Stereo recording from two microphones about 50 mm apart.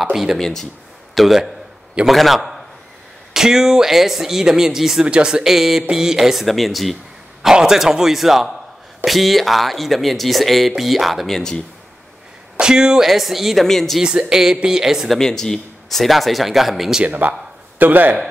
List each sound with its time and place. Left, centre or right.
0.1 s speech: centre
0.4 s speech: centre
1.1 s a man's voice: centre
5.0 s speech: centre
7.4 s speech: centre
11.2 s speech: centre
12.5 s speech: centre
13.0 s speech: centre
13.7 s speech: centre
14.0 s speech: centre
15.0 s speech: centre
17.0 s a man's voice: right